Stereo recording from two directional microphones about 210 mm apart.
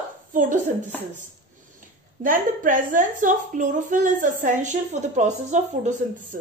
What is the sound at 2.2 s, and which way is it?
A woman's voice, 40° right (ahead or behind).